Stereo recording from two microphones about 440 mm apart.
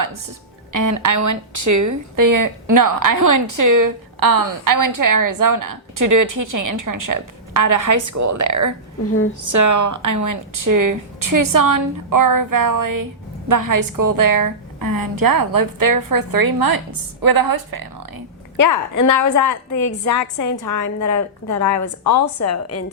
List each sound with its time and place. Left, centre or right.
0.7 s speech: right
18.5 s a woman's voice: left